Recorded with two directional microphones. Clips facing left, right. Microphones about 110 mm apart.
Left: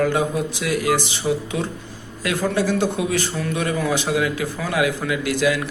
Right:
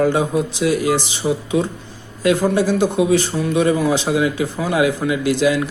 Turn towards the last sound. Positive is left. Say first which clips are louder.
# right 4 dB
turn(degrees=-25)  # may be behind; listen again after turning